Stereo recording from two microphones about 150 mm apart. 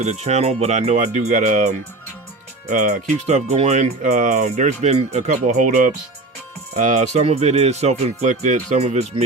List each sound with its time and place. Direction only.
0.0 s speech: 50° right (ahead or behind)
5.5 s speech: 65° right (ahead or behind); by 9.2 s 45° right (ahead or behind)